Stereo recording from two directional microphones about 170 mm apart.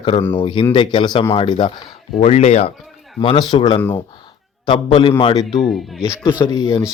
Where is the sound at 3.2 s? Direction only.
25° left (ahead or behind).